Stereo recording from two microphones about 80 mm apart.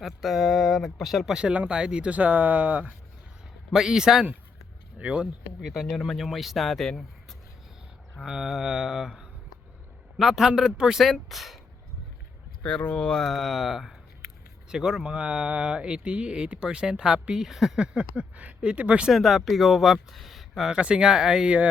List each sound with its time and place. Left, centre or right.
0.0 s speech: centre
3.7 s speech: centre
5.5 s speech: centre
12.6 s speech: centre
19.1 s speech: centre
20.7 s speech: centre